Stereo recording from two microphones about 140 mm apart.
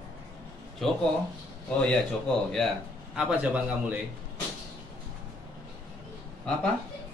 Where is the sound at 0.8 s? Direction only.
Centre (ahead or behind).